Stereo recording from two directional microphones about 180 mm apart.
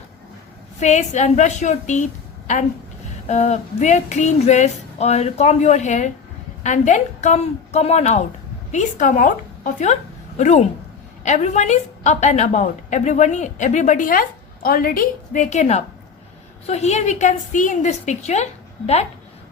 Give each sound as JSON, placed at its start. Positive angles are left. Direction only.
{"t": 0.8, "sound": "a woman's voice", "side_deg": 40}
{"t": 3.2, "sound": "a woman's voice", "side_deg": 40}